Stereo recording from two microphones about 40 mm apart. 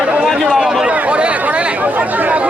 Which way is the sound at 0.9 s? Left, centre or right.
Right.